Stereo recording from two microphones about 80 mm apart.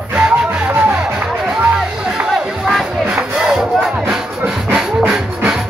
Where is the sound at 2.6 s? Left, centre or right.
Centre.